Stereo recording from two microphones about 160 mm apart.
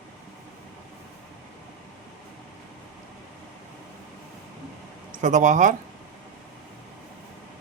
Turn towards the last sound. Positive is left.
turn(degrees=-50)  # may be behind; listen again after turning